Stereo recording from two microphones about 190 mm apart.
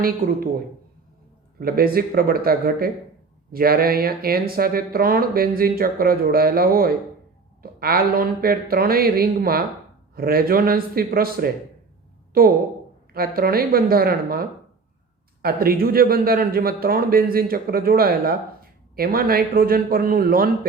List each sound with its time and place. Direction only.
0.2 s a man's voice: 50° right (ahead or behind)
1.5 s a man's voice: 50° right (ahead or behind)